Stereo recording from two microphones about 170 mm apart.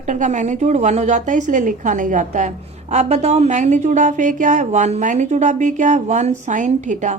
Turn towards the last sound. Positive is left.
turn(degrees=-45)  # may be behind; listen again after turning